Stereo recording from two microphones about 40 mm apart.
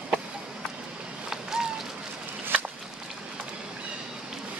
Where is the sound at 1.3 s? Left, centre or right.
Centre.